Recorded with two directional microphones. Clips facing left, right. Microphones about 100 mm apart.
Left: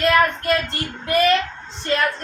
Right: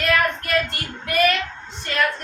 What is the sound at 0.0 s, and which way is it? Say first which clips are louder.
Child singing: left 4 dB; 30° left (ahead or behind).